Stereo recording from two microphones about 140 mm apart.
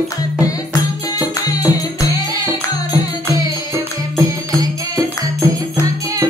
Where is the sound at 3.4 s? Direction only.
25° right (ahead or behind).